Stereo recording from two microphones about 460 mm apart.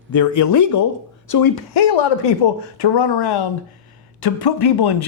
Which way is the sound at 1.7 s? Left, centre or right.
Left.